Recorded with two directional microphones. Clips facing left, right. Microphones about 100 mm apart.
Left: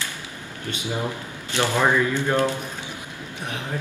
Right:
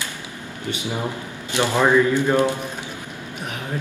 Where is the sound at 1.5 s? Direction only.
15° right (ahead or behind).